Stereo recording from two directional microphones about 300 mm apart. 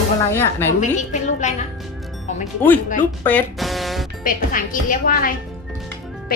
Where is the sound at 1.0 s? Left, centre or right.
Left.